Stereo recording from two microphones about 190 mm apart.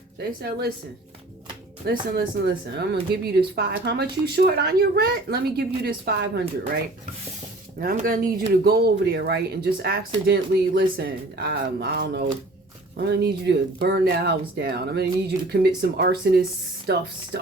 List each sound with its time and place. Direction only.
0.2 s speech: 55° right (ahead or behind)
1.9 s speech: 50° right (ahead or behind)
7.8 s speech: 50° right (ahead or behind)